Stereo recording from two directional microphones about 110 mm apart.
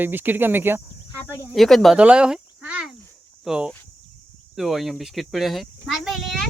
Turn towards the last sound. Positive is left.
turn(degrees=0)  # may be behind; listen again after turning